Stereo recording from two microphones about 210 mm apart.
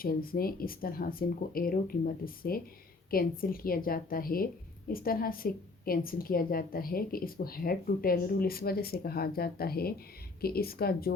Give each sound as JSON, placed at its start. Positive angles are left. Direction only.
{"t": 0.0, "sound": "a woman's voice", "side_deg": 45}